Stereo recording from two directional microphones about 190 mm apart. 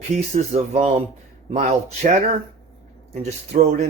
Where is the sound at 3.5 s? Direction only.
40° right (ahead or behind).